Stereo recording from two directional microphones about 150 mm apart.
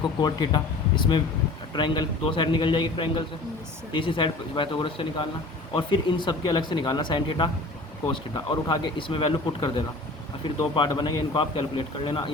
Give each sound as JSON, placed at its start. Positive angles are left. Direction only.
{"t": 0.0, "sound": "speech", "side_deg": 30}
{"t": 8.6, "sound": "speech", "side_deg": 30}